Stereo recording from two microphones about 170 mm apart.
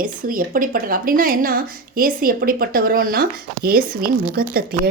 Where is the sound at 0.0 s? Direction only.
55° right (ahead or behind).